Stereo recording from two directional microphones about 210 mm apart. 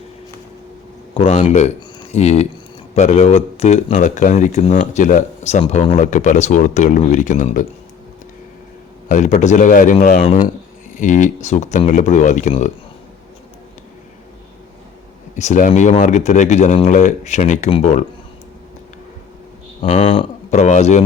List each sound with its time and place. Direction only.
1.1 s speech: 30° left (ahead or behind)
9.0 s speech: 35° left (ahead or behind)
15.4 s speech: 35° left (ahead or behind)
19.8 s speech: 30° left (ahead or behind)